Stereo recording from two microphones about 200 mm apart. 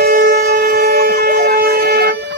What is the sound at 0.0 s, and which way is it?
Shofar, 50° right (ahead or behind).